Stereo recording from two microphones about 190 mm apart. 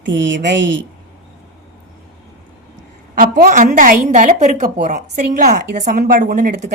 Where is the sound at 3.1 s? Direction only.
45° right (ahead or behind).